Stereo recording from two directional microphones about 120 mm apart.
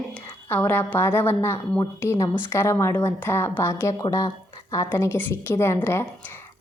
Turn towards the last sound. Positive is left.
turn(degrees=20)  # may be behind; listen again after turning